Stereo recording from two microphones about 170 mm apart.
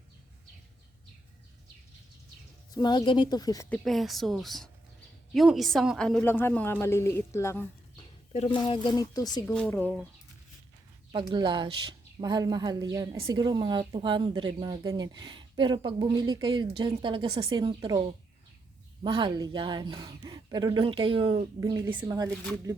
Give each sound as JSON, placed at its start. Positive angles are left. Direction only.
{"t": 2.7, "sound": "speech", "side_deg": 25}
{"t": 3.7, "sound": "a woman's voice", "side_deg": 0}
{"t": 8.5, "sound": "speech", "side_deg": 30}
{"t": 9.5, "sound": "a woman's voice", "side_deg": 5}
{"t": 11.1, "sound": "a woman's voice", "side_deg": -25}